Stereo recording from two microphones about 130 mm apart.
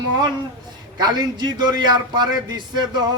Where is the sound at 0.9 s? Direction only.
30° right (ahead or behind).